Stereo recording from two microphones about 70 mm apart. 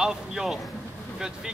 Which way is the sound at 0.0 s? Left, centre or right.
Centre.